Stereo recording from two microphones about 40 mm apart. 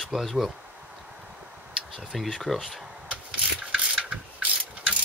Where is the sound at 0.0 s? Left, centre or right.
Centre.